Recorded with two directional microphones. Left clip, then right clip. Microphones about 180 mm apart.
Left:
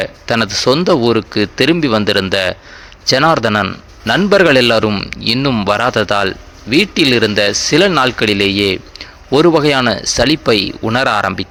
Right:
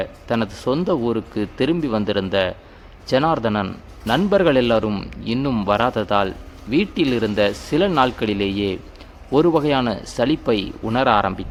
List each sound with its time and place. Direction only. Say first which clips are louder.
0.0 s speech: left 7 dB; 20° left (ahead or behind)
4.9 s speech: left 9 dB; 5° left (ahead or behind)
5.2 s speech: left 8 dB; 15° left (ahead or behind)